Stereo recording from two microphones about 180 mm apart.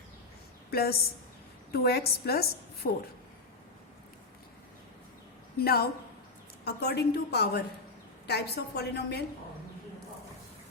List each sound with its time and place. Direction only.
0.7 s a woman's voice: 60° left (ahead or behind)
5.5 s a woman's voice: 60° left (ahead or behind)